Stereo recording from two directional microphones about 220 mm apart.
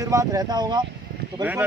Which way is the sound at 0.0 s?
15° right (ahead or behind).